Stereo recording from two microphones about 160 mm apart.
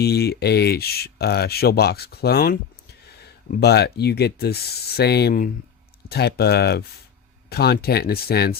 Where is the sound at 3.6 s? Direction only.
90° left.